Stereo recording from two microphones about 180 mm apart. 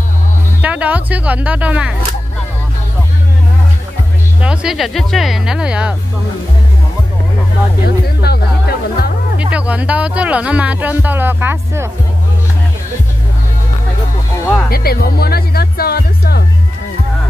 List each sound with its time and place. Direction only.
0.6 s speech: 10° right (ahead or behind)
4.4 s speech: 5° right (ahead or behind)
7.8 s music: 60° left (ahead or behind)
9.4 s speech: 5° right (ahead or behind)
14.7 s speech: 55° left (ahead or behind)